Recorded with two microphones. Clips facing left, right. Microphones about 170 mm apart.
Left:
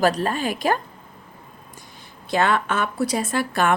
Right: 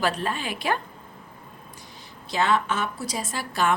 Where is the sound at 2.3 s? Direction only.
55° left (ahead or behind).